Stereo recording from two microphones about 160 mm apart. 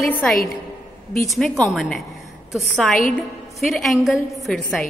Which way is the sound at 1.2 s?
Centre (ahead or behind).